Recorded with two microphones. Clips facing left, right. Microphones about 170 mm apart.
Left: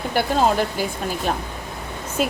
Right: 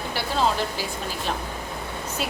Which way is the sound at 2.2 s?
50° left (ahead or behind).